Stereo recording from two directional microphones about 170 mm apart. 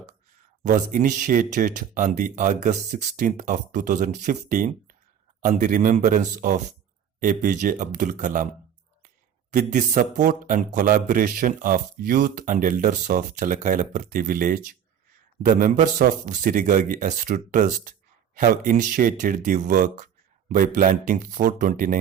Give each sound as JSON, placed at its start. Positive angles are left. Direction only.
{"t": 0.6, "sound": "a man's voice", "side_deg": -50}
{"t": 9.5, "sound": "a man's voice", "side_deg": -45}